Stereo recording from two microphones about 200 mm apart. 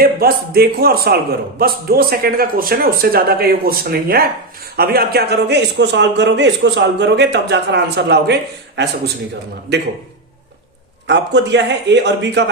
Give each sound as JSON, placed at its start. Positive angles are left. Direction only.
{"t": 0.0, "sound": "a man's voice", "side_deg": -50}
{"t": 11.0, "sound": "a man's voice", "side_deg": -60}